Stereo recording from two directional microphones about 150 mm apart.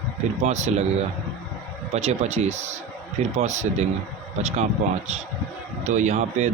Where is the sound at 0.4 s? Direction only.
50° right (ahead or behind).